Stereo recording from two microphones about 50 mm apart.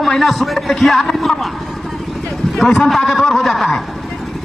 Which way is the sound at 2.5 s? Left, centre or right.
Centre.